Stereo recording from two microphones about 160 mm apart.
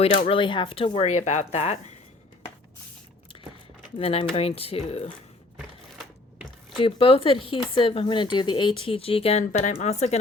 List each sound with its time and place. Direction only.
0.0 s speech: 40° left (ahead or behind)
3.9 s speech: 35° left (ahead or behind)
6.7 s speech: 35° left (ahead or behind)